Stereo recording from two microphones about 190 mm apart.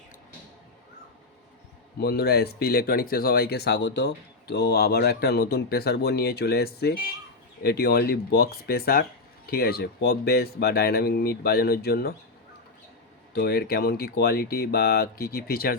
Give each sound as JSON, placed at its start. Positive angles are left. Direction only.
{"t": 2.0, "sound": "speech", "side_deg": 55}
{"t": 13.3, "sound": "speech", "side_deg": 55}